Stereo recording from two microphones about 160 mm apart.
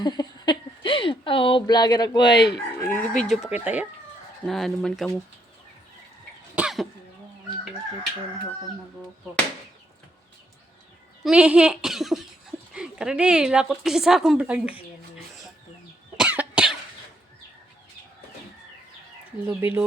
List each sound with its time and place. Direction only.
0.0 s a sound: 25° left (ahead or behind)
2.3 s chicken: 90° left
2.7 s chicken: 10° left (ahead or behind); by 3.8 s 10° right (ahead or behind)
4.4 s chicken: centre (ahead or behind)
6.6 s cough: 5° right (ahead or behind)
11.2 s speech: 5° right (ahead or behind)
16.1 s cough: 10° right (ahead or behind)
19.5 s speech: 15° right (ahead or behind)